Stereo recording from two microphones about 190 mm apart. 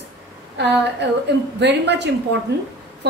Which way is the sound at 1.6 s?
65° right (ahead or behind).